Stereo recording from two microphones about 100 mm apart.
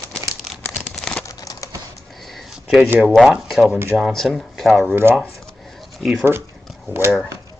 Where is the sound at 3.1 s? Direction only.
Centre (ahead or behind).